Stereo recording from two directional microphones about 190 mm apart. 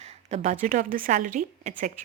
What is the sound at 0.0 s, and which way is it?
A woman's voice, 35° right (ahead or behind).